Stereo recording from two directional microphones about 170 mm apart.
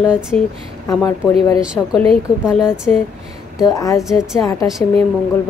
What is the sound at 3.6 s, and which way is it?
Speech, 20° left (ahead or behind).